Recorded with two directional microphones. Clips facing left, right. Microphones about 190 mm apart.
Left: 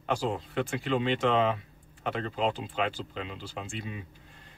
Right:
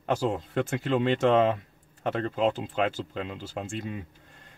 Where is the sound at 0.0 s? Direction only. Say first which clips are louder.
Right 3 dB; 45° right (ahead or behind).